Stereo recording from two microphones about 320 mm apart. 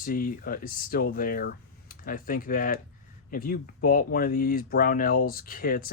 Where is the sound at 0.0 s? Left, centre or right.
Left.